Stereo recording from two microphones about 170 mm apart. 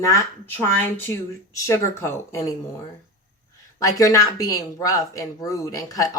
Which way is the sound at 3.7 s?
20° left (ahead or behind).